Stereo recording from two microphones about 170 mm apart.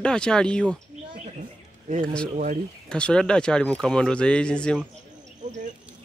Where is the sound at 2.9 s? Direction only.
5° left (ahead or behind).